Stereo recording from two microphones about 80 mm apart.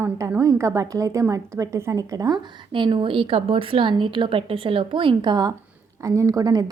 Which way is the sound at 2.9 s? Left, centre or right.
Right.